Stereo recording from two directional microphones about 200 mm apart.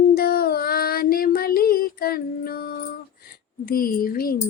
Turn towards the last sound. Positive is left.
turn(degrees=45)  # may be behind; listen again after turning